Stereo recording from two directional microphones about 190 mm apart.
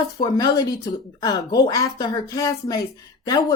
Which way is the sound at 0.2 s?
20° left (ahead or behind).